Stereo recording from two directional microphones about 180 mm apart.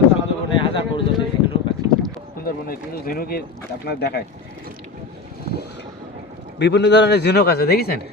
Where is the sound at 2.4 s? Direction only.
55° left (ahead or behind).